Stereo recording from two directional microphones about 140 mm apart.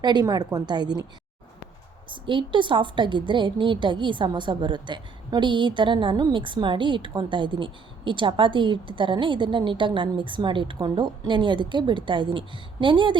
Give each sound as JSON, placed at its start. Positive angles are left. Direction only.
{"t": 0.0, "sound": "a woman's voice", "side_deg": -30}
{"t": 2.0, "sound": "a woman's voice", "side_deg": -35}